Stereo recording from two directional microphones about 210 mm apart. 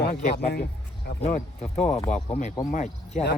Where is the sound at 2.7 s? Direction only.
35° left (ahead or behind).